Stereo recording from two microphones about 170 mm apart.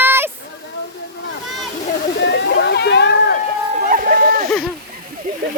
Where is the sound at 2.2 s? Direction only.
90° left.